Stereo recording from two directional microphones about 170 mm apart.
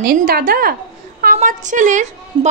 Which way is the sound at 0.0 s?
60° right (ahead or behind).